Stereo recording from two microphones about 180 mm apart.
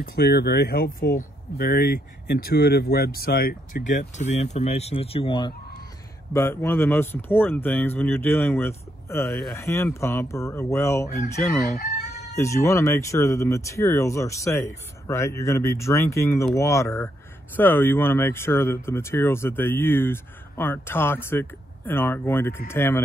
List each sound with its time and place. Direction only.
0.0 s speech: 60° left (ahead or behind); by 5.5 s 30° left (ahead or behind)
6.3 s speech: 15° left (ahead or behind)
9.2 s speech: centre (ahead or behind)
9.5 s speech: 15° left (ahead or behind)
12.4 s speech: 15° left (ahead or behind)